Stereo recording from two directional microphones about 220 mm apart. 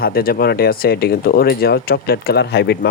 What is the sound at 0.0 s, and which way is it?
Speech, 45° left (ahead or behind).